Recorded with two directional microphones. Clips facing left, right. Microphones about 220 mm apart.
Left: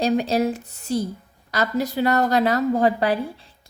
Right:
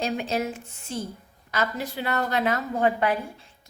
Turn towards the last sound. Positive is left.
turn(degrees=35)  # may be behind; listen again after turning